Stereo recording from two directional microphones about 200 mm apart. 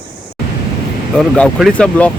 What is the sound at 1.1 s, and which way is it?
Speech, 5° left (ahead or behind).